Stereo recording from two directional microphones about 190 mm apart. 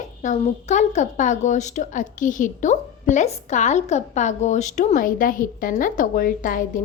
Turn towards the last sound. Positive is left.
turn(degrees=45)  # may be behind; listen again after turning